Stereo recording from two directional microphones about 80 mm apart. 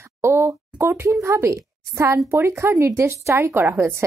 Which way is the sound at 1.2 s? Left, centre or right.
Right.